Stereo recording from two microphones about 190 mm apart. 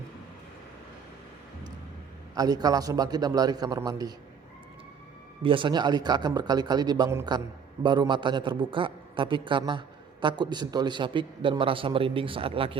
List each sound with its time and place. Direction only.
2.3 s a man's voice: 20° right (ahead or behind)
5.4 s a man's voice: 25° right (ahead or behind)